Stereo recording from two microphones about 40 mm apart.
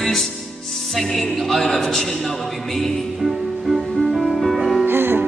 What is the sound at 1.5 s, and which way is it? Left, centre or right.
Speech, centre.